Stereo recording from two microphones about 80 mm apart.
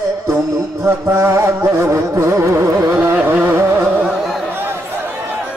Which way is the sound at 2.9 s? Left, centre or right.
Right.